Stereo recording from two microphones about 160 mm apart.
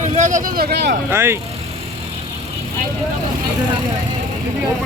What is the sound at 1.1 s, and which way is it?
Speech, 15° right (ahead or behind).